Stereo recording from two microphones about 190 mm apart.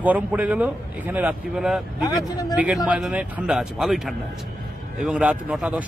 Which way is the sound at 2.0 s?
20° left (ahead or behind).